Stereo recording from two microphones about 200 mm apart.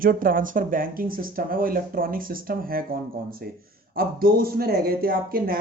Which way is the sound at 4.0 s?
45° right (ahead or behind).